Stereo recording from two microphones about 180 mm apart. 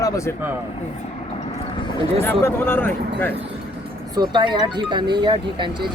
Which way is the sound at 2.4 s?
10° left (ahead or behind).